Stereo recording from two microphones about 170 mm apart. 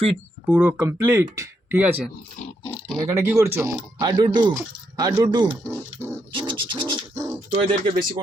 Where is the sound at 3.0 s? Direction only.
15° right (ahead or behind).